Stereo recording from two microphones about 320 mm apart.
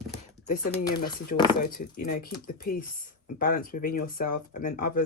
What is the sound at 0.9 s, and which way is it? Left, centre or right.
Speech, left.